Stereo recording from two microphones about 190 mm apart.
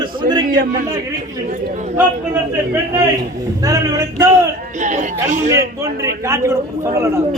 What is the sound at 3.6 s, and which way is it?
Speech, 15° right (ahead or behind).